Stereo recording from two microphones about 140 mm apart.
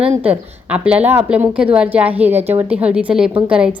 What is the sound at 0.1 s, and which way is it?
A woman's voice, 10° right (ahead or behind).